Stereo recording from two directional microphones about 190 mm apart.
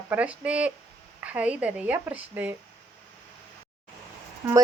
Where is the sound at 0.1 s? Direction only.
5° right (ahead or behind).